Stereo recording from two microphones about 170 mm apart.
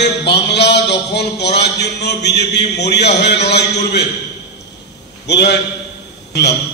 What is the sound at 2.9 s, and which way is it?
A man's voice, 80° left.